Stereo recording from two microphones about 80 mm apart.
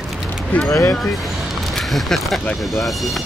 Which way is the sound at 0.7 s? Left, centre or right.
Left.